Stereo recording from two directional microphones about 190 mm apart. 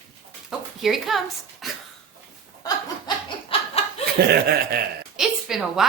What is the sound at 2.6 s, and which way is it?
Laughter, 25° left (ahead or behind).